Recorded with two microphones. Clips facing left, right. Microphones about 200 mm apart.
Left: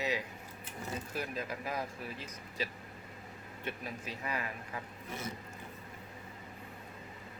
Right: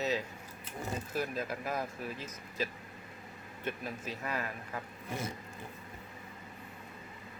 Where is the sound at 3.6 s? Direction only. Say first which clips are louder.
Right 3 dB; 45° right (ahead or behind).